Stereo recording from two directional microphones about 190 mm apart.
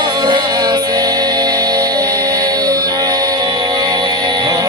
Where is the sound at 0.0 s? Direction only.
20° right (ahead or behind).